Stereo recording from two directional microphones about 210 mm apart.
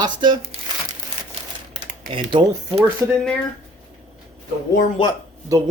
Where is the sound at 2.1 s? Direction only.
25° right (ahead or behind).